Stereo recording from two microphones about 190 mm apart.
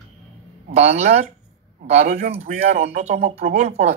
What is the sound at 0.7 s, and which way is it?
Speech, 35° right (ahead or behind).